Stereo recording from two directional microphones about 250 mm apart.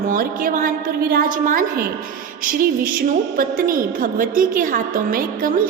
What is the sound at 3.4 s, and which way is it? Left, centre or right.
A woman's voice, right.